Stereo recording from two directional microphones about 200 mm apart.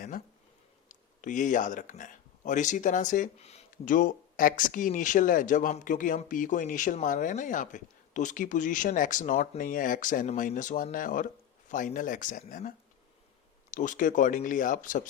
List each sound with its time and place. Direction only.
1.2 s speech: 40° left (ahead or behind)